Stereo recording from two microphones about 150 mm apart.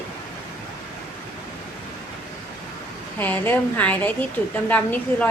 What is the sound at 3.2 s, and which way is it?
A woman's voice, 10° left (ahead or behind).